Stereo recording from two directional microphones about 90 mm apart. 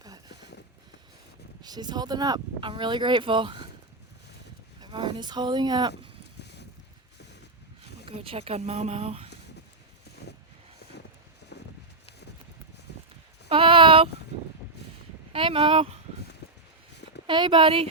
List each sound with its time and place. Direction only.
1.6 s speech: 50° right (ahead or behind)
2.6 s speech: 70° right (ahead or behind)
4.8 s speech: 65° right (ahead or behind)
8.0 s speech: 90° right
13.5 s a sound: 75° right (ahead or behind)
15.3 s speech: 85° right
17.2 s a woman's voice: 60° right (ahead or behind); by 17.8 s 75° right (ahead or behind)